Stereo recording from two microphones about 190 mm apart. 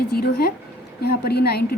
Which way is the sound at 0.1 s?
55° left (ahead or behind).